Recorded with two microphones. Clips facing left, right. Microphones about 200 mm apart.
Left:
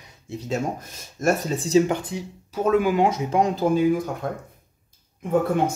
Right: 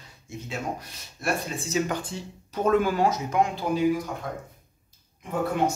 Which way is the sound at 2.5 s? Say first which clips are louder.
Left 2 dB; 5° left (ahead or behind).